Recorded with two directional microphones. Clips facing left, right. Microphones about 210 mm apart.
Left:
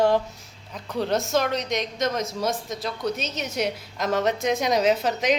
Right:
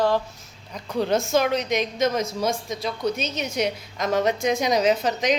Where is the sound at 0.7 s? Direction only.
Centre (ahead or behind).